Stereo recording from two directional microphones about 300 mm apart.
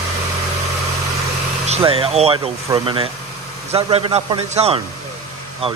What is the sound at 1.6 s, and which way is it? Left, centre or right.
A man's voice, centre.